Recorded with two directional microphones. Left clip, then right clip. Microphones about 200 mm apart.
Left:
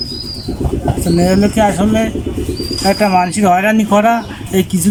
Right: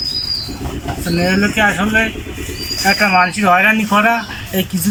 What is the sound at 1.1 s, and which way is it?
Speech, 30° left (ahead or behind).